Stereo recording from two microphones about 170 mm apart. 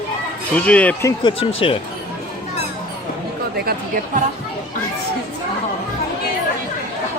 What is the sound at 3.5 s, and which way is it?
Speech, 65° right (ahead or behind).